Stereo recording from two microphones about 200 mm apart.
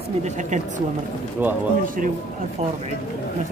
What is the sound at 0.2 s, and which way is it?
Speech, 35° right (ahead or behind).